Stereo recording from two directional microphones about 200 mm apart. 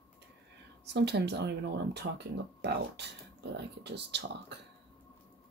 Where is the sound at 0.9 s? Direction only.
55° right (ahead or behind).